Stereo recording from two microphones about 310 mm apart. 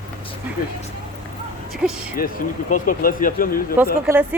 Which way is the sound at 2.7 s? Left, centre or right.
Left.